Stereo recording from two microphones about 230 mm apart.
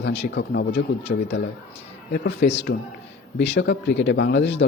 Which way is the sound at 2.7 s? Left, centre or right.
Left.